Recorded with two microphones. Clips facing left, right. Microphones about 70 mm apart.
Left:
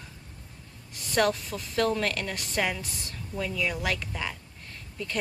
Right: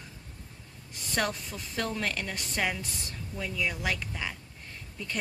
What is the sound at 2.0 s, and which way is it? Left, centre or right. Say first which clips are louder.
Speech: left 3 dB; centre.